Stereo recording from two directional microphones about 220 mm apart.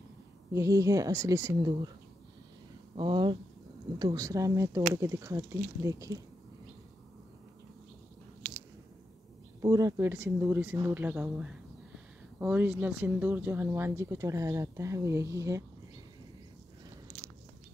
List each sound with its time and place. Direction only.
0.5 s speech: 15° right (ahead or behind)
3.0 s speech: 20° right (ahead or behind)
9.6 s speech: 15° right (ahead or behind)